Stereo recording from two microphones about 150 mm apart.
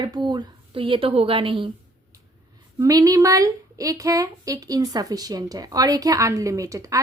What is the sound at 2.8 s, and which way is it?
A woman's voice, 25° right (ahead or behind).